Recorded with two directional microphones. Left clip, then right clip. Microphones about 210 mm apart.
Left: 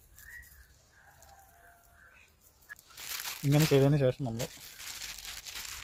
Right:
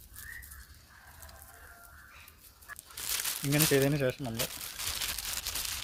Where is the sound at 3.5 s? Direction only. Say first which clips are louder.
Left 1 dB; 15° left (ahead or behind).